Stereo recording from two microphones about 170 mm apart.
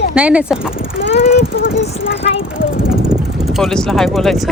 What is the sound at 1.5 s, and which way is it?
Speech, 90° left.